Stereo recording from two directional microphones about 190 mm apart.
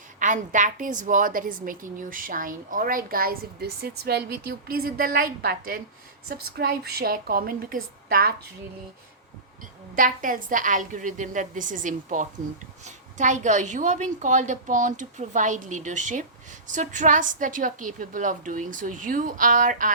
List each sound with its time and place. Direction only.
0.2 s a woman's voice: 45° right (ahead or behind)
9.9 s a woman's voice: 45° right (ahead or behind)